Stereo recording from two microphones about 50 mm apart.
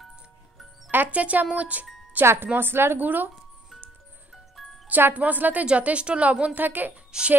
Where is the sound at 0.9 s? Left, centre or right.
Right.